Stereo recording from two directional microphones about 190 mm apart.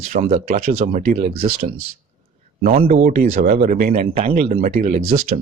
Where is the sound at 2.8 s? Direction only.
45° right (ahead or behind).